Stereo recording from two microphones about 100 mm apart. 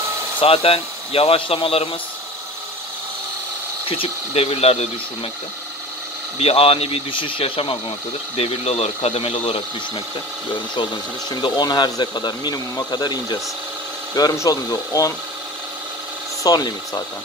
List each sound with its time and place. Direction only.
0.4 s speech: 75° left (ahead or behind)
3.9 s speech: 75° left (ahead or behind)
6.3 s speech: 85° left; by 7.7 s 65° left (ahead or behind)
8.4 s speech: 90° left
10.5 s speech: 55° left (ahead or behind); by 15.1 s 35° left (ahead or behind)
16.4 s speech: 40° left (ahead or behind)